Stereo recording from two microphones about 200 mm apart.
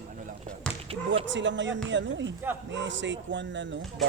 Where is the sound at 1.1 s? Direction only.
65° right (ahead or behind).